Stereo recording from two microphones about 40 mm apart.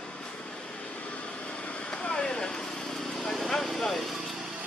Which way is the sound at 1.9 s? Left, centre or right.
Left.